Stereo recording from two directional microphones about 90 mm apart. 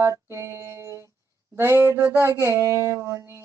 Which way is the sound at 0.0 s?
30° right (ahead or behind).